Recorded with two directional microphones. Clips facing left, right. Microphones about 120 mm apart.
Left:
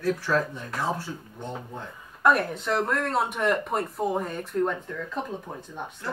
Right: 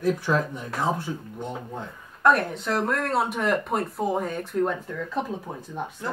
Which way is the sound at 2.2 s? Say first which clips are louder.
Right 1 dB; centre (ahead or behind).